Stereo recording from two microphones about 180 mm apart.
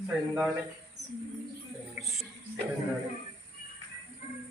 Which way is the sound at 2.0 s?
Centre (ahead or behind).